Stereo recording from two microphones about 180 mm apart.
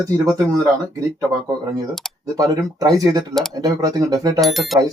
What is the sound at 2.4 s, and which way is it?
Speech, 20° right (ahead or behind).